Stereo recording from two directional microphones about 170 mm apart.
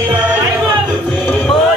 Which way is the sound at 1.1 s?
5° left (ahead or behind).